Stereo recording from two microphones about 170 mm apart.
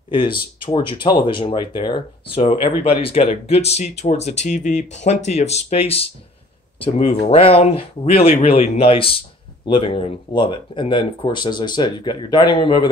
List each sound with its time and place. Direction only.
0.7 s speech: 25° left (ahead or behind)